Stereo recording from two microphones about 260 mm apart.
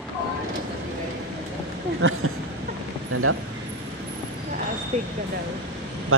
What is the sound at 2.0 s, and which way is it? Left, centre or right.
Vehicle, right.